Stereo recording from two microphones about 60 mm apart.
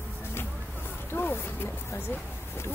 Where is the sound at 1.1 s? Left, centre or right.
Left.